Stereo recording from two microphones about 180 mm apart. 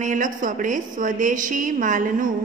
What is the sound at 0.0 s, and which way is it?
A woman's voice, 45° right (ahead or behind).